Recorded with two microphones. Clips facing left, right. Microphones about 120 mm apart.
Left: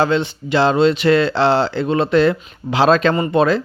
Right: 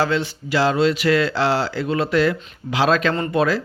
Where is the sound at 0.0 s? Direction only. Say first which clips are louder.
Left 4 dB; 25° left (ahead or behind).